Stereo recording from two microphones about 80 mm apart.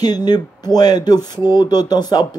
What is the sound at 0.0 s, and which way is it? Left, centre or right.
Speech, left.